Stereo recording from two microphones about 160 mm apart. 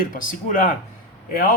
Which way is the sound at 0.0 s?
60° left (ahead or behind).